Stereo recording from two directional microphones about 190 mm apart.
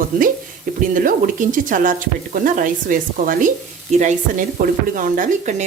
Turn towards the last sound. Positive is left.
turn(degrees=-40)  # may be behind; listen again after turning